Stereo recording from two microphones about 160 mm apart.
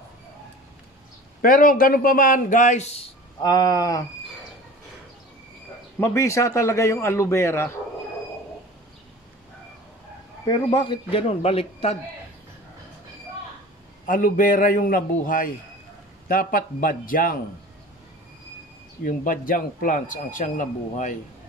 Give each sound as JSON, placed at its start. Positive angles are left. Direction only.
{"t": 1.4, "sound": "speech", "side_deg": 60}
{"t": 3.4, "sound": "speech", "side_deg": 25}
{"t": 5.9, "sound": "a man's voice", "side_deg": 15}
{"t": 10.4, "sound": "a man's voice", "side_deg": 25}
{"t": 14.0, "sound": "speech", "side_deg": 60}
{"t": 19.0, "sound": "speech", "side_deg": 60}